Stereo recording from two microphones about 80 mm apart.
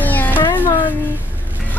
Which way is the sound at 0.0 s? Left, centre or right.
Left.